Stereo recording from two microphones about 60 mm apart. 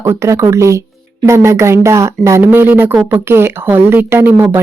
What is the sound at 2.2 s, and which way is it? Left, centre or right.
Speech, right.